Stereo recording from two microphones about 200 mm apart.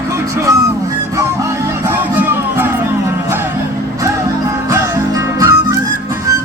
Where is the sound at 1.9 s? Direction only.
10° right (ahead or behind).